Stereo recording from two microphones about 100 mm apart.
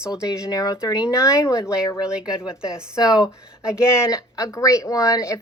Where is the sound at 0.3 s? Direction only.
35° left (ahead or behind).